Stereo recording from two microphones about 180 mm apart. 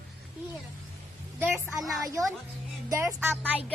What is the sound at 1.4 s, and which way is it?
Speech, 15° right (ahead or behind).